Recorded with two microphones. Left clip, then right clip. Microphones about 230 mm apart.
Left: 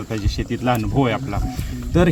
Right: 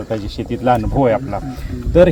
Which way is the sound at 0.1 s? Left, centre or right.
Left.